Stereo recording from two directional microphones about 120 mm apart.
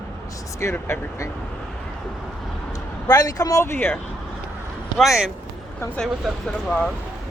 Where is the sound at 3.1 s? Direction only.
30° left (ahead or behind).